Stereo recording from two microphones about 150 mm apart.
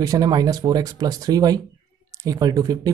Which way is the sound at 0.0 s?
25° right (ahead or behind).